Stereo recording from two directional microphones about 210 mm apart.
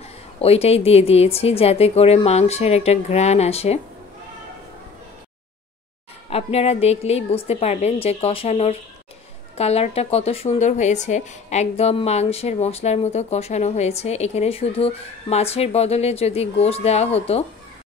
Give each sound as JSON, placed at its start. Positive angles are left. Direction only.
{"t": 0.4, "sound": "speech", "side_deg": 30}
{"t": 6.3, "sound": "speech", "side_deg": 30}